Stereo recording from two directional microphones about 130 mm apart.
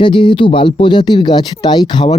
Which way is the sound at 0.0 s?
40° left (ahead or behind).